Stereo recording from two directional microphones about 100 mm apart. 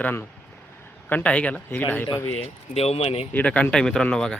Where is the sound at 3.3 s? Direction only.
15° left (ahead or behind).